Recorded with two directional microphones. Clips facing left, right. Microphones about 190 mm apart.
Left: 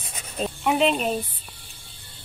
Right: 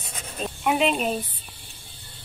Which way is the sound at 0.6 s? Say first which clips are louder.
Left 1 dB; 5° right (ahead or behind).